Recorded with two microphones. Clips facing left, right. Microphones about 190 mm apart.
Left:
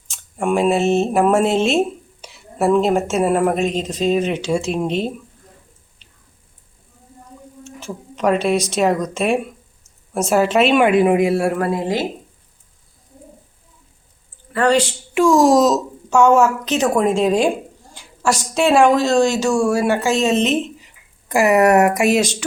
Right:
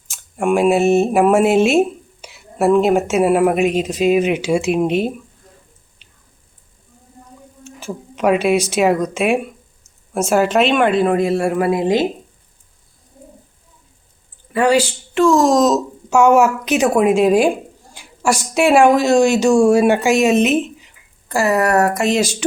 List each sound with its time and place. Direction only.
0.1 s speech: 5° right (ahead or behind)
6.0 s squish: 5° right (ahead or behind)
7.6 s speech: 5° right (ahead or behind)
11.5 s speech: 10° right (ahead or behind)
14.5 s speech: 10° right (ahead or behind)
15.1 s speech: 10° left (ahead or behind)
16.0 s speech: 10° right (ahead or behind)
21.2 s speech: 15° left (ahead or behind)